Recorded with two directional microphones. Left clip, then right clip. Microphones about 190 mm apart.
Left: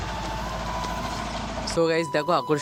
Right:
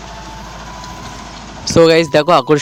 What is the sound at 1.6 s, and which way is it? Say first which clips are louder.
Speech: right 14 dB; 50° right (ahead or behind).